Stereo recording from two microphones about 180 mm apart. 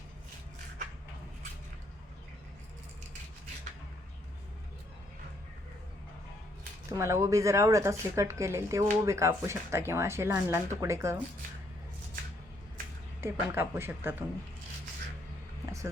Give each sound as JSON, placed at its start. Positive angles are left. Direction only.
{"t": 6.9, "sound": "speech", "side_deg": -15}
{"t": 13.2, "sound": "speech", "side_deg": -15}